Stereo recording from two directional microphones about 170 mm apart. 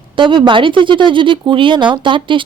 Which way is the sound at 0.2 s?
30° right (ahead or behind).